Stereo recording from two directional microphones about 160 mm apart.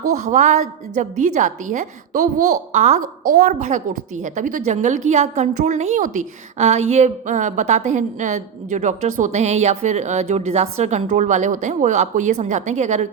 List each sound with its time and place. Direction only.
0.1 s a woman's voice: 50° right (ahead or behind)